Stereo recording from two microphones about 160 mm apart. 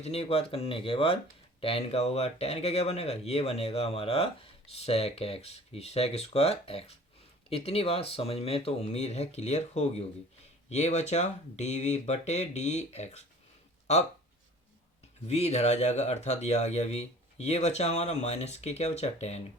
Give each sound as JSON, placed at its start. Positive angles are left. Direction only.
{"t": 0.0, "sound": "speech", "side_deg": 40}
{"t": 15.3, "sound": "speech", "side_deg": 40}